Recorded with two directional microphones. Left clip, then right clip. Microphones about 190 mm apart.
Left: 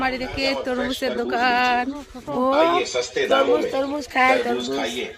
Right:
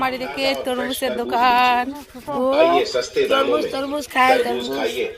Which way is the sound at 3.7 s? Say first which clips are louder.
Even; 5° left (ahead or behind).